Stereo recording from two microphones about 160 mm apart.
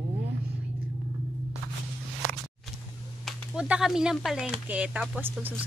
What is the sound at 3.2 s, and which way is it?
Speech, 5° right (ahead or behind).